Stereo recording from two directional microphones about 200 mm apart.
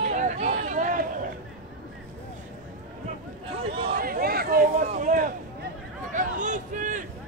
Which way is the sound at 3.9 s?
45° right (ahead or behind).